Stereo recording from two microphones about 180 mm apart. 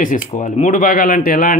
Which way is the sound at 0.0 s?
45° left (ahead or behind).